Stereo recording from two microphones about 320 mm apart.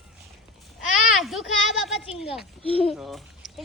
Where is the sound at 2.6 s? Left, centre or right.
Centre.